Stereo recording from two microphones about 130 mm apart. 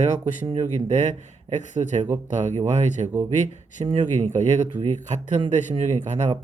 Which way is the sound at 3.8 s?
40° right (ahead or behind).